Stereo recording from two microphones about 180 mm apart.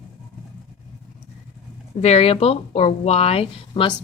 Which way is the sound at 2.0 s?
35° left (ahead or behind).